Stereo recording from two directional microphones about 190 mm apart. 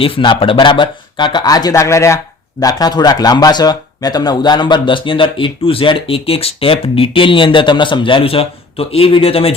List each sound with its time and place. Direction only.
0.0 s speech: 25° left (ahead or behind)